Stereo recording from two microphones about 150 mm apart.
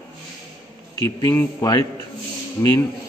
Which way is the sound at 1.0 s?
25° left (ahead or behind).